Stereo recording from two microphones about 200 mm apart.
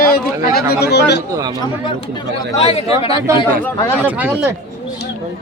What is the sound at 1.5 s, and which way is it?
Speech, 20° left (ahead or behind).